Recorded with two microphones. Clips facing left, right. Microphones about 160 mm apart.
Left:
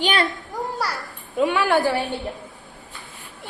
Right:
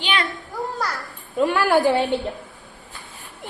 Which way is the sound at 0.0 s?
40° left (ahead or behind).